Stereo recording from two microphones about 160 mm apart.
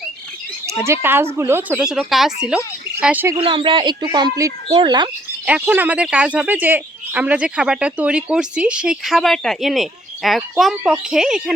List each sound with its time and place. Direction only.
0.9 s speech: 15° right (ahead or behind)
3.3 s speech: 30° right (ahead or behind)
5.5 s speech: 10° right (ahead or behind)